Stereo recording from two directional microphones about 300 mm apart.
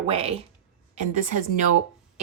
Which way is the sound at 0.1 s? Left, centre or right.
Centre.